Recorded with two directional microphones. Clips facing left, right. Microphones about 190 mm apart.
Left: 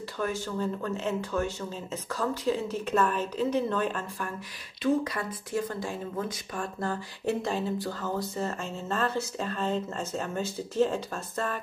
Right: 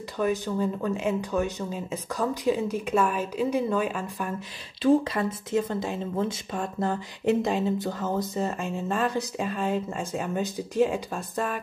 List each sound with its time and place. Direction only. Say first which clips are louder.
0.2 s speech: right 5 dB; 15° right (ahead or behind)
4.8 s speech: right 5 dB; 25° right (ahead or behind)